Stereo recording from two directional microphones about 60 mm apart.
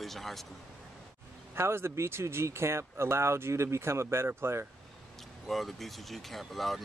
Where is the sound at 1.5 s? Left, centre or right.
Right.